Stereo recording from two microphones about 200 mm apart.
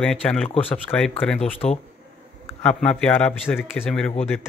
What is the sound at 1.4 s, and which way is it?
Speech, 30° left (ahead or behind).